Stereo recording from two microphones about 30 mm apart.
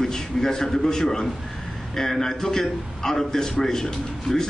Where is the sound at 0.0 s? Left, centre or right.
Centre.